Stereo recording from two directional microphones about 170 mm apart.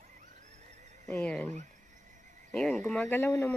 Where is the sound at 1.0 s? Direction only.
10° left (ahead or behind).